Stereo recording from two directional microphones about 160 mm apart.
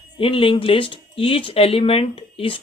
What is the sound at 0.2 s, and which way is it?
Speech, 35° left (ahead or behind).